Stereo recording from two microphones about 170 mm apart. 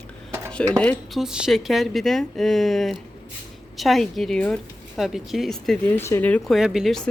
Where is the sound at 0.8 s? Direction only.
Centre (ahead or behind).